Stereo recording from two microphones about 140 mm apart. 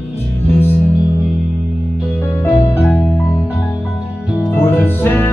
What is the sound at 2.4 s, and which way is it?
Music, 15° left (ahead or behind).